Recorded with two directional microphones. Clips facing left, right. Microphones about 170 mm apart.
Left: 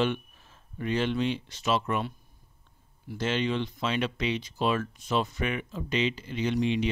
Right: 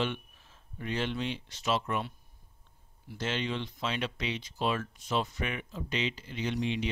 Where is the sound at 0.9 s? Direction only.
90° left.